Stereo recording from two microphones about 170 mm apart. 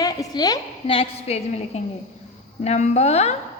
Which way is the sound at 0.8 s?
35° left (ahead or behind).